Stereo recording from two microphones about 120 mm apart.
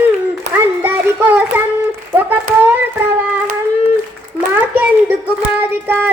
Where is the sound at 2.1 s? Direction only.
15° right (ahead or behind).